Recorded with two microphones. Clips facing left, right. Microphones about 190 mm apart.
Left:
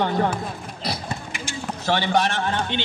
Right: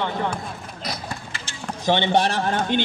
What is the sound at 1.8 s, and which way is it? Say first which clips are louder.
Speech: right 2 dB; 20° right (ahead or behind).